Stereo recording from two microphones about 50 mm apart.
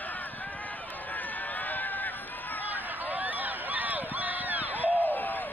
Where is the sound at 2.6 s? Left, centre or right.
Right.